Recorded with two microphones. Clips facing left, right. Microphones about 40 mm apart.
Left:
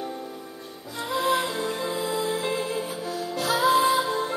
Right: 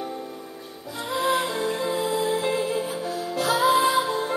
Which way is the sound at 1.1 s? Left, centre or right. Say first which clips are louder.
Right 1 dB; centre.